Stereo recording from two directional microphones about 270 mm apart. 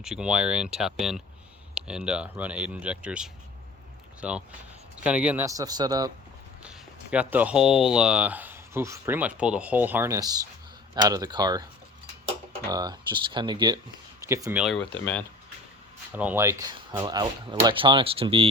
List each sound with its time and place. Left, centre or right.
0.0 s speech: centre
12.6 s speech: centre
16.1 s speech: centre